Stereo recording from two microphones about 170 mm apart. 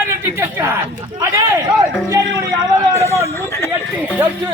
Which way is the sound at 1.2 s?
15° right (ahead or behind).